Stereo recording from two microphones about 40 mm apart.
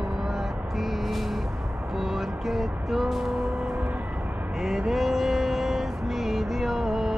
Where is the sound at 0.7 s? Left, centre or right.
Centre.